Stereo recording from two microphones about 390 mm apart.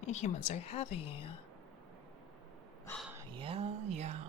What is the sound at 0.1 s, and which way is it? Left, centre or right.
A woman's voice, centre.